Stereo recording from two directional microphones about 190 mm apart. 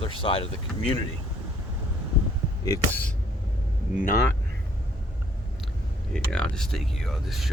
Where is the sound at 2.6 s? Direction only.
20° left (ahead or behind).